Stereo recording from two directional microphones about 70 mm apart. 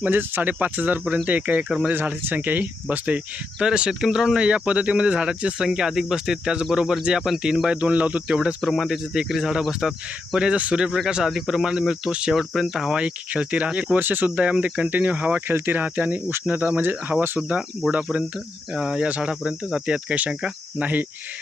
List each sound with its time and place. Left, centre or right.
0.0 s speech: right
1.9 s speech: right
3.6 s speech: centre
7.7 s speech: centre
8.6 s speech: centre; by 18.3 s right
18.7 s speech: centre